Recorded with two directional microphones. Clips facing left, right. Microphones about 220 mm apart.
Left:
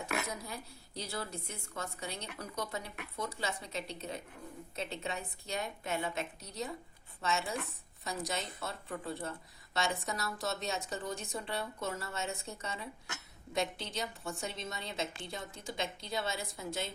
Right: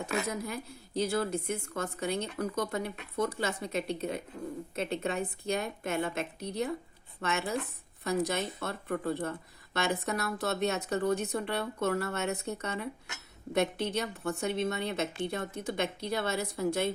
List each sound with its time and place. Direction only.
0.4 s a woman's voice: 55° right (ahead or behind)